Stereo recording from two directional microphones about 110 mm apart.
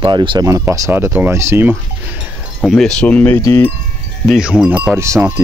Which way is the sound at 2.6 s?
Centre (ahead or behind).